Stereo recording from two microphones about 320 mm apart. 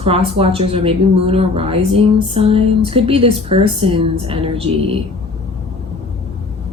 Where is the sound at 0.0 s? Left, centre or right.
Centre.